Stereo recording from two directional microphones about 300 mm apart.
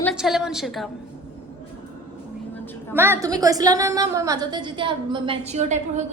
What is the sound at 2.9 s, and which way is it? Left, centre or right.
A woman's voice, centre.